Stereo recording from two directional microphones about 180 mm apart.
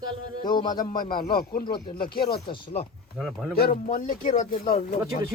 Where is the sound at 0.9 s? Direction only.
55° left (ahead or behind).